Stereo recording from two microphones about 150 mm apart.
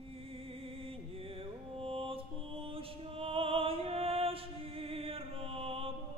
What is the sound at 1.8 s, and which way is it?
Music, 40° right (ahead or behind).